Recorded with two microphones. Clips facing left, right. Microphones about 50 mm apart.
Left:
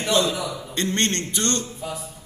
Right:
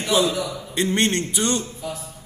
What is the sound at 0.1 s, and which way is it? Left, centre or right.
A man's voice, centre.